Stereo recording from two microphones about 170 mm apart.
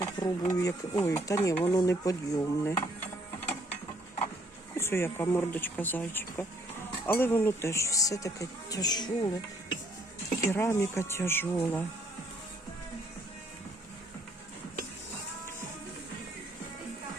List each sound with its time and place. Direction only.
0.0 s speech: 20° left (ahead or behind)
4.8 s speech: 15° left (ahead or behind)
10.4 s speech: 15° left (ahead or behind)